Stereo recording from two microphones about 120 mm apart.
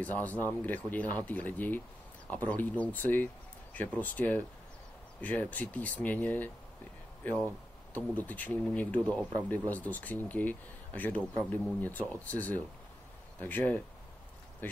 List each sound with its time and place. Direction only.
0.0 s speech: 15° left (ahead or behind)